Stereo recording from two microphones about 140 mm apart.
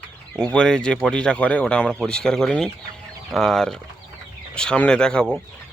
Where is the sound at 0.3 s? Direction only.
5° left (ahead or behind).